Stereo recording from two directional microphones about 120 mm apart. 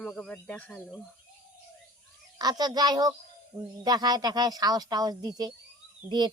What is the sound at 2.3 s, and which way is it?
Speech, 35° right (ahead or behind).